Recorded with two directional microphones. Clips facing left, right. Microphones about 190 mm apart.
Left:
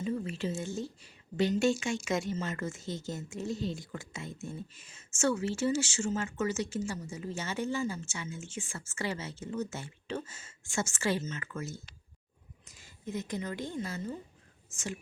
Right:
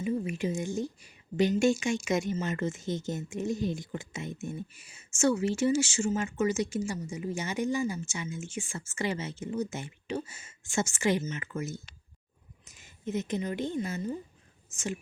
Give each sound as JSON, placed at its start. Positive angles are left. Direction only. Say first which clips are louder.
{"t": 0.0, "sound": "a woman's voice", "louder": "right 3 dB", "side_deg": -15}